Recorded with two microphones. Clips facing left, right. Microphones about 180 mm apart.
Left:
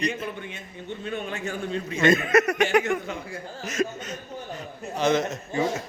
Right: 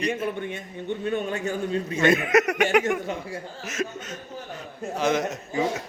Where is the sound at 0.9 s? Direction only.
50° right (ahead or behind).